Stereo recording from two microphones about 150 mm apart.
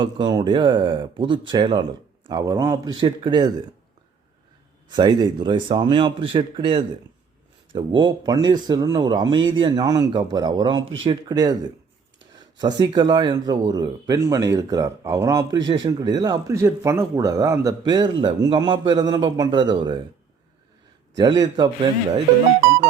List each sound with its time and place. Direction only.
0.0 s speech: 30° right (ahead or behind)
4.9 s speech: 30° right (ahead or behind)
21.2 s speech: 30° right (ahead or behind)